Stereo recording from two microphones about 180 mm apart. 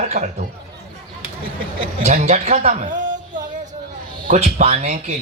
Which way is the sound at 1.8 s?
35° right (ahead or behind).